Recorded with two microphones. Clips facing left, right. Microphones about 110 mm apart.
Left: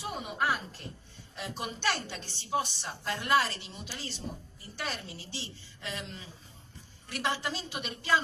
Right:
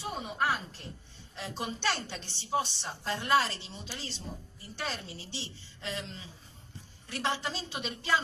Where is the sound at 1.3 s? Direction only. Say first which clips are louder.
Right 1 dB; 25° right (ahead or behind).